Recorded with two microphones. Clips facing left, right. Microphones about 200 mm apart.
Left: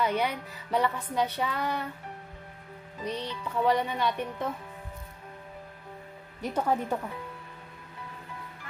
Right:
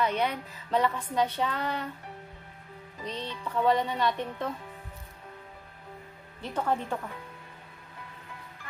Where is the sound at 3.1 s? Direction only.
10° left (ahead or behind).